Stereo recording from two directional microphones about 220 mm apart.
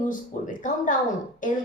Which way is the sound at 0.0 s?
35° left (ahead or behind).